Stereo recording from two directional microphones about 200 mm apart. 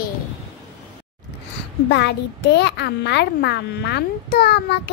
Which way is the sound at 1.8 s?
60° left (ahead or behind).